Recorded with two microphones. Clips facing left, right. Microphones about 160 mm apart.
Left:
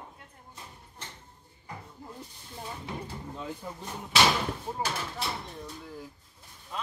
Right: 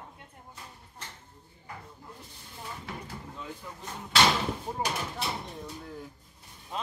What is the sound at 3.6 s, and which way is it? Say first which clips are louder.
Speech: left 4 dB; 30° left (ahead or behind).